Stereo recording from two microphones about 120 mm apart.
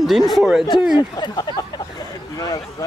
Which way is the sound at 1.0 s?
35° left (ahead or behind).